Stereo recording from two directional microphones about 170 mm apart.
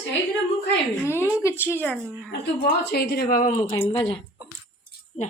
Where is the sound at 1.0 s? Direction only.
15° left (ahead or behind).